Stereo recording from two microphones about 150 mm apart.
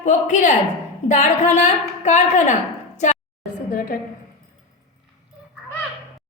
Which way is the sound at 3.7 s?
70° left (ahead or behind).